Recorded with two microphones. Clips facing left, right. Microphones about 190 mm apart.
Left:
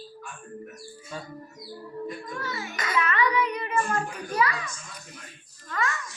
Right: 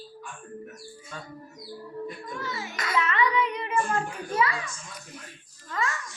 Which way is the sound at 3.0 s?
25° right (ahead or behind).